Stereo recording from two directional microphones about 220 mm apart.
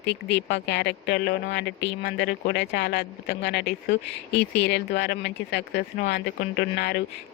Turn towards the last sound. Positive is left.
turn(degrees=45)  # may be behind; listen again after turning